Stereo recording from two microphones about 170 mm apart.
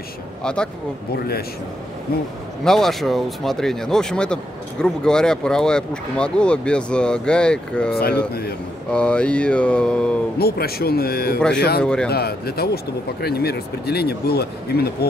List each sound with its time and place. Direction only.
0.4 s speech: 5° left (ahead or behind)
1.1 s speech: 65° left (ahead or behind)
2.6 s speech: centre (ahead or behind)
8.9 s mantra: 5° left (ahead or behind)
10.4 s speech: 65° left (ahead or behind)
11.3 s speech: 5° left (ahead or behind)
12.1 s speech: 65° left (ahead or behind)